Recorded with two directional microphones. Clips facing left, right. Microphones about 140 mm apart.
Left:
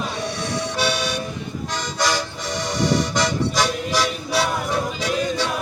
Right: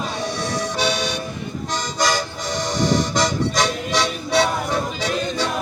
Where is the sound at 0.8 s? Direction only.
5° left (ahead or behind).